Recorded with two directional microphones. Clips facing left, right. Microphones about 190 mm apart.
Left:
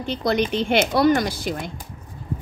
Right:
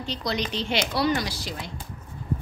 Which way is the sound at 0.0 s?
55° left (ahead or behind).